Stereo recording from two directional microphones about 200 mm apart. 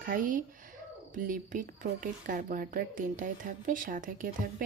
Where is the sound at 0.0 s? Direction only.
40° right (ahead or behind).